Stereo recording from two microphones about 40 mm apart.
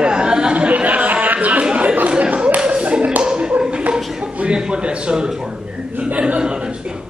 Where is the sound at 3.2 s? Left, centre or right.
Right.